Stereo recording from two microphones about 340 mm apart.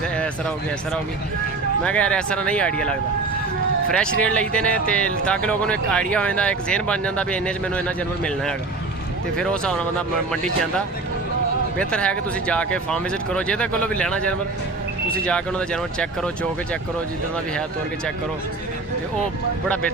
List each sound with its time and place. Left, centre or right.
1.8 s speech: centre
11.8 s speech: centre